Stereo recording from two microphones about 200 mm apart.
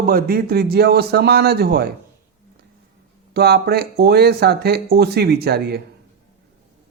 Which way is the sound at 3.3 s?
55° right (ahead or behind).